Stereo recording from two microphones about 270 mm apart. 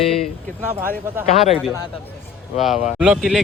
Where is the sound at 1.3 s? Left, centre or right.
Left.